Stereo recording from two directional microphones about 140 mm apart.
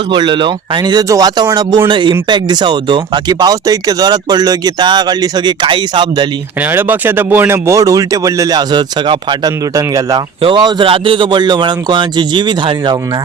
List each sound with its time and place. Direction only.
0.1 s speech: 35° right (ahead or behind)
6.7 s speech: 15° right (ahead or behind); by 13.0 s 35° right (ahead or behind)